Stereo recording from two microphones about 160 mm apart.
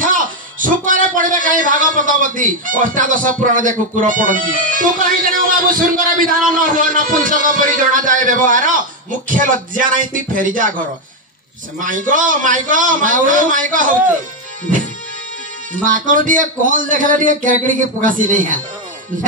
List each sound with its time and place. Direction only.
0.0 s a man's voice: 55° right (ahead or behind)
11.8 s a man's voice: 55° right (ahead or behind)
15.7 s a man's voice: 55° right (ahead or behind)